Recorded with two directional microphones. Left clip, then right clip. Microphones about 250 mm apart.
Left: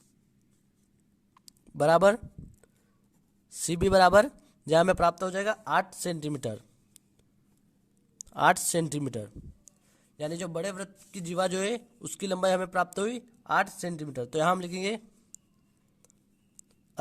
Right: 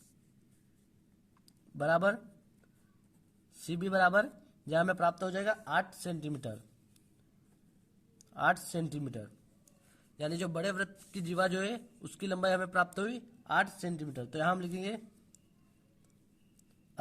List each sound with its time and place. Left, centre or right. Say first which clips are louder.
1.8 s a man's voice: left 8 dB; left
3.7 s a man's voice: left 8 dB; left
8.2 s speech: left 7 dB; left
10.2 s a man's voice: left 3 dB; left